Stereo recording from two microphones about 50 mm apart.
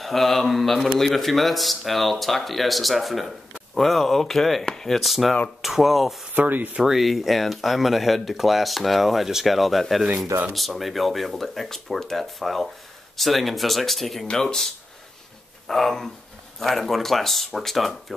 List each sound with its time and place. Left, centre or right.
0.0 s speech: centre
6.3 s speech: right
6.7 s speech: centre